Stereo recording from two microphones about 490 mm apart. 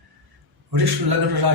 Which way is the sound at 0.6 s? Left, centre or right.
Right.